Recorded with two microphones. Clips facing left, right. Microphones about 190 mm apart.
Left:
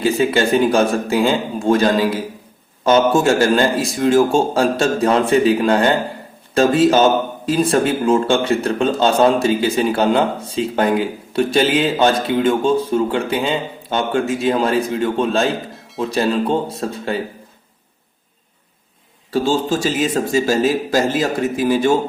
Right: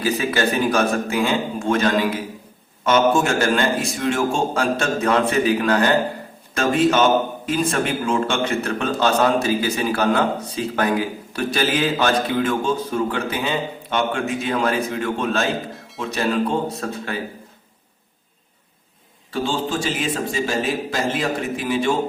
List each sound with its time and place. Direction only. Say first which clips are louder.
0.0 s a man's voice: left 5 dB; 25° left (ahead or behind)
19.3 s a man's voice: left 6 dB; 40° left (ahead or behind)